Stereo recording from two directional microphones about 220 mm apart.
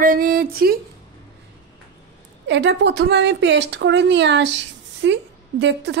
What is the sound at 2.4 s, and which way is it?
A woman's voice, 55° right (ahead or behind).